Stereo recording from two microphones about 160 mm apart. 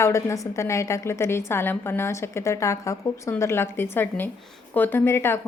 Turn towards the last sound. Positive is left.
turn(degrees=15)  # may be behind; listen again after turning